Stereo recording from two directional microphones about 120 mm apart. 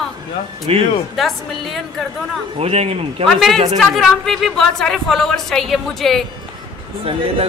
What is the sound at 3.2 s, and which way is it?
Speech, centre (ahead or behind).